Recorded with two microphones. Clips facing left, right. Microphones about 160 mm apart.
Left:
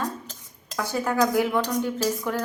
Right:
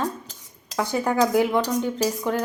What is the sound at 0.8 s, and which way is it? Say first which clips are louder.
A woman's voice: right 2 dB; 15° right (ahead or behind).